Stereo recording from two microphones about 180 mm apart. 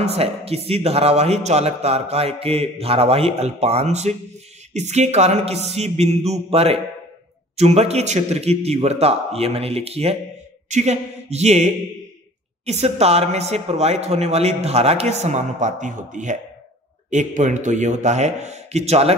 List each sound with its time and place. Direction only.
0.0 s a man's voice: 35° right (ahead or behind)